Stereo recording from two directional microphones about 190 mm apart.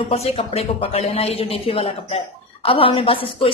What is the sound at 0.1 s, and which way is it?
A man's voice, 30° left (ahead or behind).